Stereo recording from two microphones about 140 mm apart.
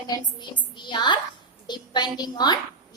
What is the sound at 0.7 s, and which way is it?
A woman's voice, 35° left (ahead or behind).